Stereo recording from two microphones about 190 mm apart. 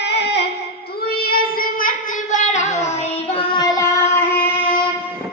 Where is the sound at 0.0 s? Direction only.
60° left (ahead or behind).